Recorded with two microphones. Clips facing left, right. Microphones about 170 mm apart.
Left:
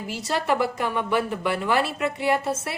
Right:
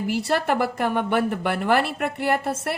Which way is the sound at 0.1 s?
60° right (ahead or behind).